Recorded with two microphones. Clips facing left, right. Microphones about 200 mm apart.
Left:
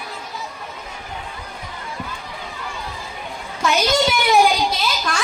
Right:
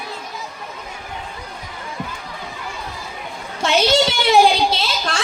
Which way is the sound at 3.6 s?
30° right (ahead or behind).